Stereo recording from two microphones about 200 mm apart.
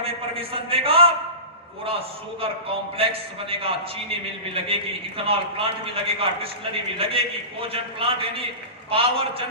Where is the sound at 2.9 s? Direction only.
30° right (ahead or behind).